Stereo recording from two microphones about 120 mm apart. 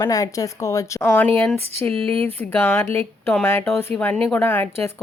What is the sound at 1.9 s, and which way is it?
Speech, 50° right (ahead or behind).